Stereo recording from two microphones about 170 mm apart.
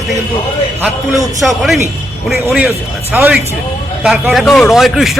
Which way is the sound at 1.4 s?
5° right (ahead or behind).